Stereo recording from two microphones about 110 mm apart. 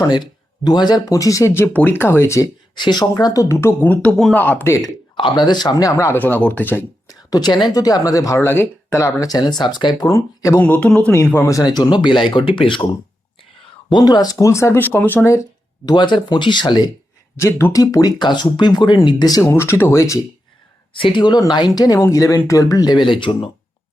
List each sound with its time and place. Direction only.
0.1 s speech: 40° left (ahead or behind)
2.7 s speech: 40° left (ahead or behind); by 4.9 s 25° left (ahead or behind)
5.1 s speech: 45° left (ahead or behind)
6.1 s speech: 15° left (ahead or behind)
7.1 s speech: 35° left (ahead or behind)
10.6 s speech: 10° left (ahead or behind)
11.5 s speech: 35° left (ahead or behind)
13.9 s speech: 35° left (ahead or behind); by 15.3 s 20° left (ahead or behind)
15.9 s speech: 40° left (ahead or behind)
17.3 s speech: 25° left (ahead or behind)
19.5 s speech: 25° left (ahead or behind)
20.9 s speech: 50° left (ahead or behind)